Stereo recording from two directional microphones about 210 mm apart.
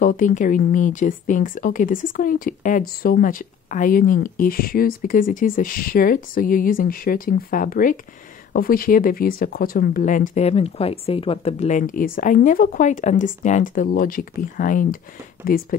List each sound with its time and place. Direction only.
0.0 s speech: 40° left (ahead or behind)